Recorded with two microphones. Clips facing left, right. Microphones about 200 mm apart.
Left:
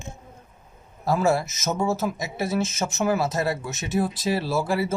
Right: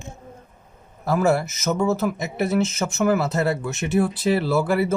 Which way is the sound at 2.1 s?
60° right (ahead or behind).